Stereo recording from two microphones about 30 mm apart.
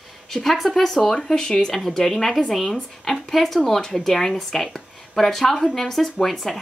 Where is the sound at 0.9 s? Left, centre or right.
Centre.